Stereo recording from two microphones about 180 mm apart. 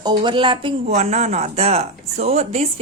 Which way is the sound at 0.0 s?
25° right (ahead or behind).